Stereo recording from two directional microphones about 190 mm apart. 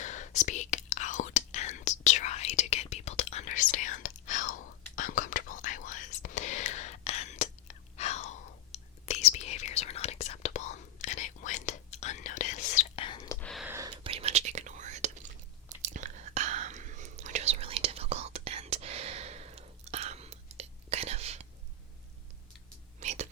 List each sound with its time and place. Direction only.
0.0 s whispering: 40° left (ahead or behind)
13.1 s whispering: 20° left (ahead or behind)
13.4 s a sound: centre (ahead or behind)
13.7 s whispering: 15° right (ahead or behind)
14.0 s whispering: 30° right (ahead or behind)
23.0 s whispering: 35° right (ahead or behind)